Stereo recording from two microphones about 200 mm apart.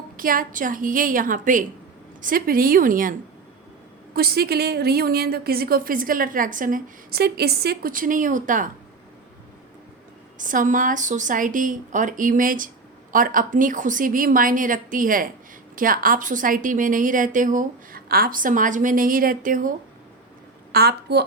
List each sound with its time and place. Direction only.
0.2 s a woman's voice: 45° right (ahead or behind)
10.3 s a woman's voice: 40° right (ahead or behind)
20.7 s a woman's voice: 55° right (ahead or behind)